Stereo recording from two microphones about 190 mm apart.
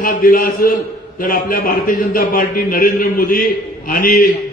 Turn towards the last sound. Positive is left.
turn(degrees=45)  # may be behind; listen again after turning